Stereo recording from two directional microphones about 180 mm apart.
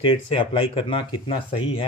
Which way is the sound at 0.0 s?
30° left (ahead or behind).